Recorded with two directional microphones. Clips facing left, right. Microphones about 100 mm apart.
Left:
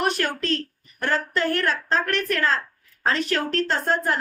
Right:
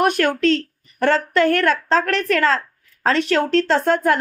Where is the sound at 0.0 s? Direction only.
55° right (ahead or behind).